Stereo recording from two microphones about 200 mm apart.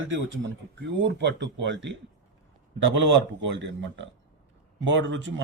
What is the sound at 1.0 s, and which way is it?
Speech, 60° right (ahead or behind).